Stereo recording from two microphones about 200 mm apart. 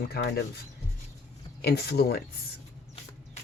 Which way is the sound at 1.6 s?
50° left (ahead or behind).